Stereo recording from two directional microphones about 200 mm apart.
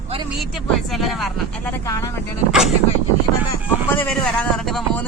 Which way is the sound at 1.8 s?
15° left (ahead or behind).